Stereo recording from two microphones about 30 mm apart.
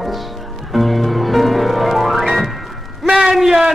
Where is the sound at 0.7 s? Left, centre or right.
Centre.